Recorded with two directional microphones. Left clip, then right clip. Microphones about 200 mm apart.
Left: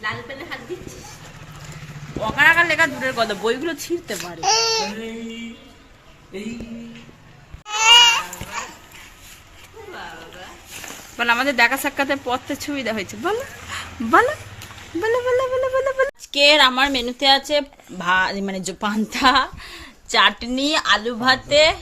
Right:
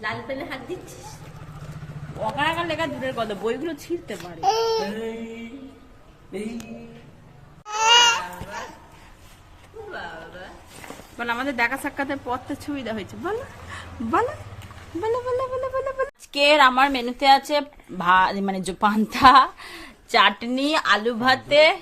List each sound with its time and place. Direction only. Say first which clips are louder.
2.3 s a man's voice: left 11 dB; 15° left (ahead or behind)
4.2 s speech: left 2 dB; 15° right (ahead or behind)
7.7 s goat: left 4 dB; 25° right (ahead or behind)
11.2 s speech: left 7 dB; 10° left (ahead or behind)
13.7 s dog: left 7 dB; 10° left (ahead or behind)
15.0 s speech: left 5 dB; 5° left (ahead or behind)